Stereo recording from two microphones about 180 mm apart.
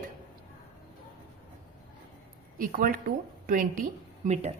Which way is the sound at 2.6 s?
50° right (ahead or behind).